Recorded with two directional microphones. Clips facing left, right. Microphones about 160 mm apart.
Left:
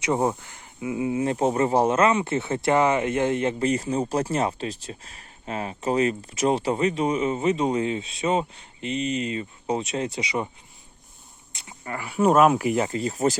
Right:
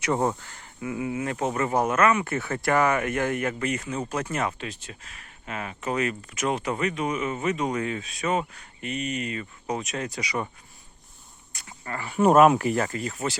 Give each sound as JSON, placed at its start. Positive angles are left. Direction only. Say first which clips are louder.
{"t": 0.0, "sound": "speech", "louder": "left 2 dB", "side_deg": 15}
{"t": 11.5, "sound": "walk", "louder": "left 1 dB", "side_deg": 15}
{"t": 12.2, "sound": "speech", "louder": "right 1 dB", "side_deg": 0}
{"t": 12.6, "sound": "speech", "louder": "left 2 dB", "side_deg": 20}